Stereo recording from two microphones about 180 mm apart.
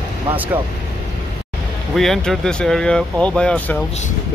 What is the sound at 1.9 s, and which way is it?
Speech, centre (ahead or behind).